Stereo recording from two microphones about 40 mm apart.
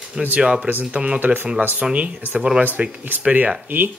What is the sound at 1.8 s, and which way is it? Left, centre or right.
Speech, right.